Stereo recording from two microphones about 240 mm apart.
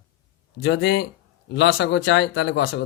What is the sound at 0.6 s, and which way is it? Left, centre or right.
Speech, left.